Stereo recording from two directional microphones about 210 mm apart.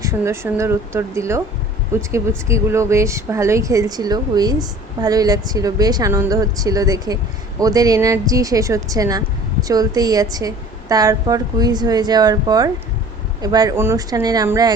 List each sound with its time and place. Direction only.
0.0 s a woman's voice: 15° right (ahead or behind)